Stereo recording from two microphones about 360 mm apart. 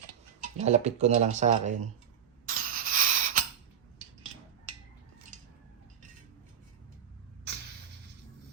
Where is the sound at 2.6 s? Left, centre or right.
Right.